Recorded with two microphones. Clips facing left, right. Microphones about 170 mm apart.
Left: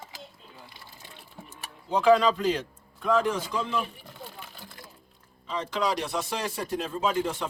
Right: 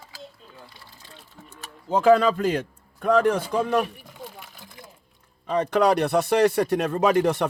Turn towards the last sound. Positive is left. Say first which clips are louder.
# right 8 dB
turn(degrees=-70)  # may be behind; listen again after turning